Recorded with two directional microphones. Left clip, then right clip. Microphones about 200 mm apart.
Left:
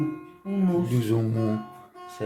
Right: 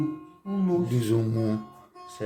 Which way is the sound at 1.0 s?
5° right (ahead or behind).